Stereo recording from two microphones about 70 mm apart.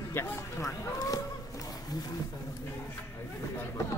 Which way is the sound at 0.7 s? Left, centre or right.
Left.